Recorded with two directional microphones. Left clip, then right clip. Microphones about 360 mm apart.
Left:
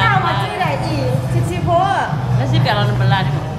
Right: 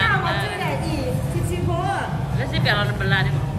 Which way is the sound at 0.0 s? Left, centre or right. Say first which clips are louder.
Left 5 dB; centre.